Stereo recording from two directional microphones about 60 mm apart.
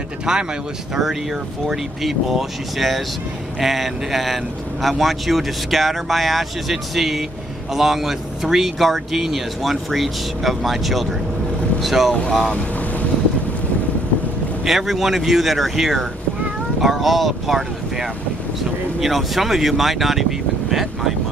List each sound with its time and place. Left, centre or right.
0.3 s speech: centre
1.7 s speech: centre
14.6 s speech: centre